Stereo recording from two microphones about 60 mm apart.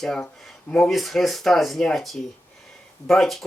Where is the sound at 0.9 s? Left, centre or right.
Centre.